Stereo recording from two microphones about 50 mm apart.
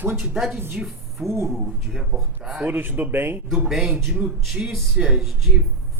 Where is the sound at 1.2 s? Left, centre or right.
Right.